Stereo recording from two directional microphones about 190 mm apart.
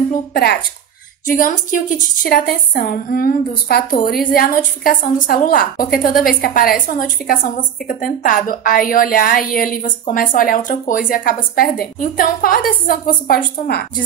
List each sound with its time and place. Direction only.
0.3 s a woman's voice: 55° left (ahead or behind)